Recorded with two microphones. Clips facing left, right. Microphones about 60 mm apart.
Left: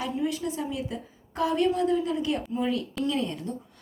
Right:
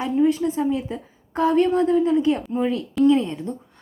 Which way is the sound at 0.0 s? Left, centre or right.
Right.